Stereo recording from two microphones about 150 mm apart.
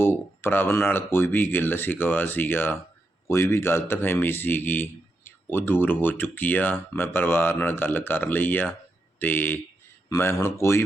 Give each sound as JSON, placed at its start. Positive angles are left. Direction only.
{"t": 0.0, "sound": "speech", "side_deg": 15}